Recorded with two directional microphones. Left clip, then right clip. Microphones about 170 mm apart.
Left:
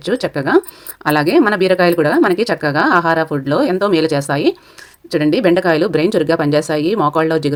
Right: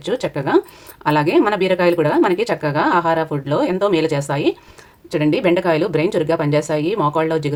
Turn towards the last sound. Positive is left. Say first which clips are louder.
# left 3 dB
turn(degrees=35)  # may be behind; listen again after turning